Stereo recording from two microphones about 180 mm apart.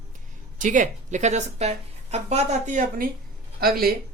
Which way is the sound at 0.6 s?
45° right (ahead or behind).